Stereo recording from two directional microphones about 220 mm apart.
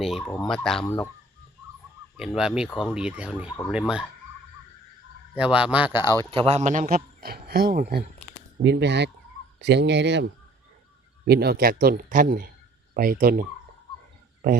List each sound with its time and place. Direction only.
0.0 s speech: centre (ahead or behind)
2.1 s speech: 5° right (ahead or behind)
5.4 s speech: 5° right (ahead or behind)
6.3 s speech: 25° right (ahead or behind)